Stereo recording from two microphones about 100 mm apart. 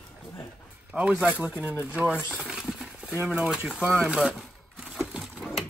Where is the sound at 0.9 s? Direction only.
10° right (ahead or behind).